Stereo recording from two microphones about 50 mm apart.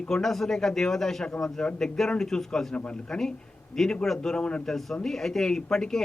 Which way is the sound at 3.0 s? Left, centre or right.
Centre.